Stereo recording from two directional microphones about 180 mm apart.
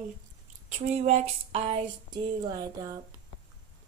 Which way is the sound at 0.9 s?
35° right (ahead or behind).